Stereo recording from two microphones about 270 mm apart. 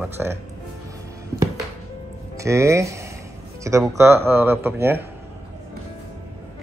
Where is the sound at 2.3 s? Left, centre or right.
Centre.